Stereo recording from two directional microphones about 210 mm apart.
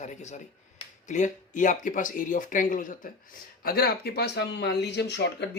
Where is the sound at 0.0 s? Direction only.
35° left (ahead or behind).